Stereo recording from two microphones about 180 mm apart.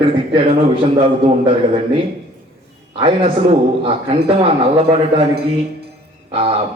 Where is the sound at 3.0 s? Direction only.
30° right (ahead or behind).